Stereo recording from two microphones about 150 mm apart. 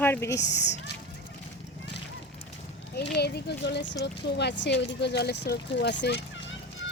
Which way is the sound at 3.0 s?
90° left.